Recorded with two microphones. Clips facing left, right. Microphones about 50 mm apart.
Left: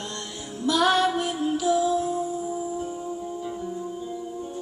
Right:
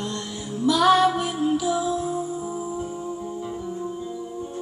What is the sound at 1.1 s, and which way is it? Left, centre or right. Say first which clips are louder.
Music: right 2 dB; centre.